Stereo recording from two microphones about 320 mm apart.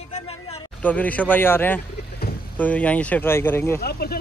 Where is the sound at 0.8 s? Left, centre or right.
Centre.